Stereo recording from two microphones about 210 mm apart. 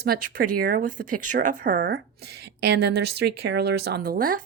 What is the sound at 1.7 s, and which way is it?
A woman's voice, 50° right (ahead or behind).